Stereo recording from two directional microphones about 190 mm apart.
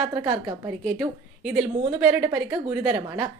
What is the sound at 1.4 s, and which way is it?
Speech, centre (ahead or behind).